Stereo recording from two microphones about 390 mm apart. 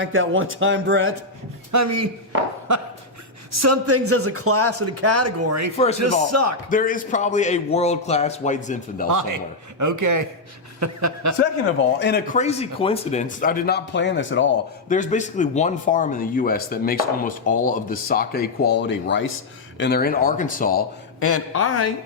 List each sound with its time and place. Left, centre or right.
0.0 s speech: right
1.7 s a man's voice: right
3.5 s a man's voice: right
5.7 s a man's voice: centre
6.2 s a man's voice: right
6.7 s a man's voice: left
9.0 s a man's voice: right
11.9 s speech: left
21.2 s a man's voice: left